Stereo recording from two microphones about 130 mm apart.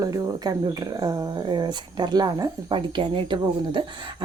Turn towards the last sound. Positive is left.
turn(degrees=-40)  # may be behind; listen again after turning